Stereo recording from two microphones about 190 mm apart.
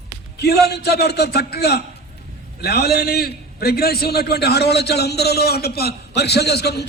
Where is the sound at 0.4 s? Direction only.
60° left (ahead or behind).